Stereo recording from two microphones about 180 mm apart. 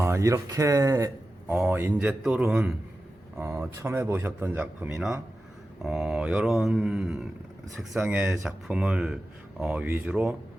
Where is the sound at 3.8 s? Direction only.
15° right (ahead or behind).